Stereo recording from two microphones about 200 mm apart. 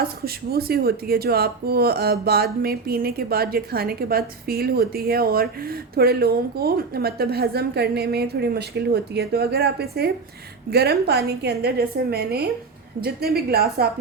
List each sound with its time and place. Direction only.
0.5 s speech: 50° right (ahead or behind)